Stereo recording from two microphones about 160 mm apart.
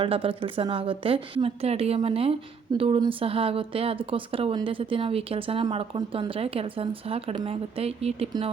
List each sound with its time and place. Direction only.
0.0 s a woman's voice: 35° right (ahead or behind)